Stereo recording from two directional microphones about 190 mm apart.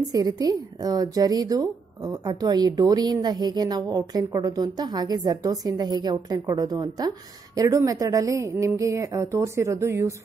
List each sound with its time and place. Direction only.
0.1 s a woman's voice: 20° right (ahead or behind)